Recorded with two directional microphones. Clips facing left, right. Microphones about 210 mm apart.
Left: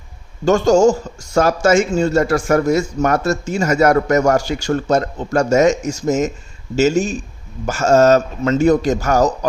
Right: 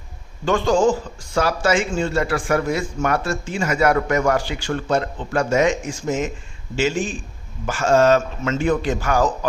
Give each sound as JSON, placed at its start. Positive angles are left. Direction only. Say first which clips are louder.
{"t": 0.4, "sound": "speech", "louder": "left 5 dB", "side_deg": 45}